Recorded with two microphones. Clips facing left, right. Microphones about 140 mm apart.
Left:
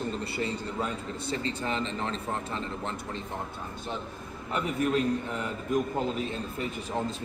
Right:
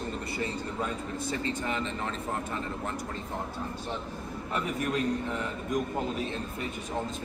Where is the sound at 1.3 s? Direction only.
30° left (ahead or behind).